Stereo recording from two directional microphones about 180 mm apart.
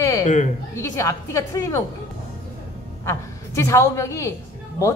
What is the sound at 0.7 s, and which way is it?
A woman's voice, 15° left (ahead or behind).